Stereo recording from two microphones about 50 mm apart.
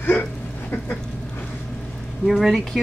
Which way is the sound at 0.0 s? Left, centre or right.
Left.